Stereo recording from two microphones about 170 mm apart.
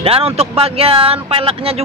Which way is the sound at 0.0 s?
35° right (ahead or behind).